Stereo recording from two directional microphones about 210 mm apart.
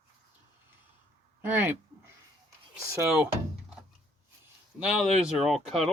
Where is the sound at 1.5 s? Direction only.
10° right (ahead or behind).